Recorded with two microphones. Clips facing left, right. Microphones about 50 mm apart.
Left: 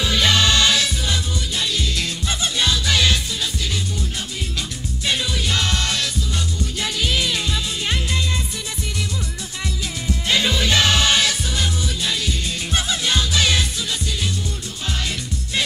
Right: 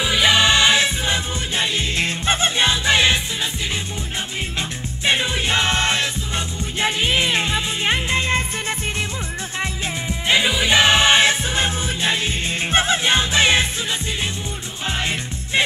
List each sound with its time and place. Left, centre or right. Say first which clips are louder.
0.0 s music: right 2 dB; centre
4.6 s music: right 2 dB; right
10.2 s music: right 2 dB; centre
14.9 s music: right 3 dB; right